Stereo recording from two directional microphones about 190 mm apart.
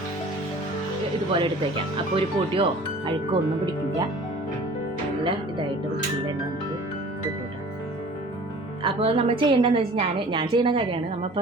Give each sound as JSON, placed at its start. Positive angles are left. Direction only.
{"t": 1.3, "sound": "a woman's voice", "side_deg": -30}
{"t": 5.2, "sound": "a woman's voice", "side_deg": -25}
{"t": 8.8, "sound": "a woman's voice", "side_deg": -30}